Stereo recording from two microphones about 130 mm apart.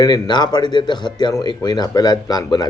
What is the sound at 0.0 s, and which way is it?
A man's voice, 35° left (ahead or behind).